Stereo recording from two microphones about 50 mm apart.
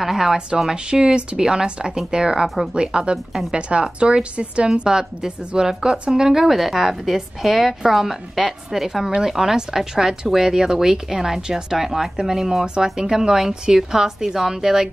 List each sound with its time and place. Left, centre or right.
0.0 s speech: centre
0.7 s a woman's voice: centre